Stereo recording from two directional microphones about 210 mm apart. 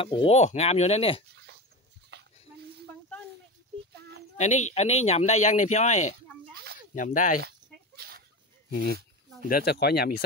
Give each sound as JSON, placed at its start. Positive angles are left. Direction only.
{"t": 0.0, "sound": "speech", "side_deg": 25}
{"t": 1.3, "sound": "a sound", "side_deg": -50}
{"t": 4.4, "sound": "speech", "side_deg": 35}
{"t": 6.5, "sound": "a sound", "side_deg": -50}
{"t": 7.0, "sound": "speech", "side_deg": 40}
{"t": 7.4, "sound": "chicken", "side_deg": -45}
{"t": 8.6, "sound": "speech", "side_deg": 50}